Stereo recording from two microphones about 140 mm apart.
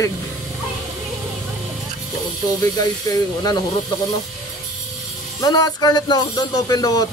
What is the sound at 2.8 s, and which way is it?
Speech, 25° left (ahead or behind).